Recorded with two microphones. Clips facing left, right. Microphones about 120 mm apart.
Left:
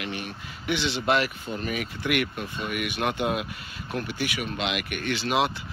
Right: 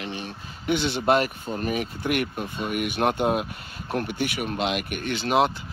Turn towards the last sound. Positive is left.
turn(degrees=-45)  # may be behind; listen again after turning